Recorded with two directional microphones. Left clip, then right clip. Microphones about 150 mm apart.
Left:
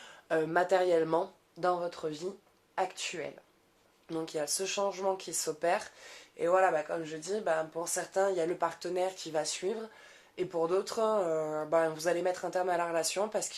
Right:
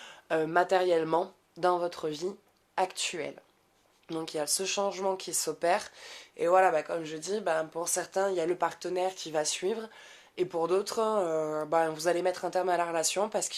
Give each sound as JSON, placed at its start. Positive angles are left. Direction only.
{"t": 0.0, "sound": "speech", "side_deg": -35}
{"t": 4.1, "sound": "speech", "side_deg": -40}